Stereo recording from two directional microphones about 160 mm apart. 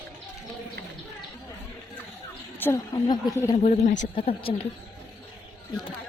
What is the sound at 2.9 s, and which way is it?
Speech, 25° left (ahead or behind).